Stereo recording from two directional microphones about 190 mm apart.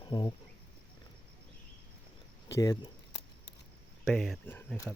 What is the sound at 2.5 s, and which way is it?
Speech, 20° left (ahead or behind).